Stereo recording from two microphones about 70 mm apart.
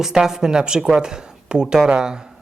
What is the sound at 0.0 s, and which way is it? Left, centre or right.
Speech, centre.